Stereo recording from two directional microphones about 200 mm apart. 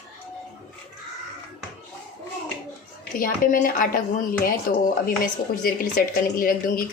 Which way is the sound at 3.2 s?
45° left (ahead or behind).